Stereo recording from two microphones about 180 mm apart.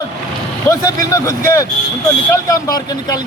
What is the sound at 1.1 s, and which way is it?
A man's voice, 15° left (ahead or behind).